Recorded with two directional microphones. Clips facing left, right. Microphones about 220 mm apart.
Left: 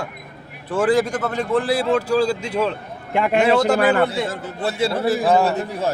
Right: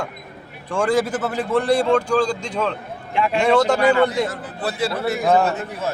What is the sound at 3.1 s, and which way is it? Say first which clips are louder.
Speech: left 3 dB; 55° left (ahead or behind).